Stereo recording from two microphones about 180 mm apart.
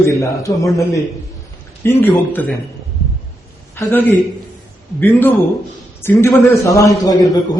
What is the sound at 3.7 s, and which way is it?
A man's voice, 10° left (ahead or behind).